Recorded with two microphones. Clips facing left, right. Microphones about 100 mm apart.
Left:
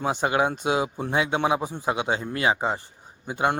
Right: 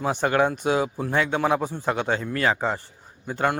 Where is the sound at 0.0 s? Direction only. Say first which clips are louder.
Right 2 dB; 15° left (ahead or behind).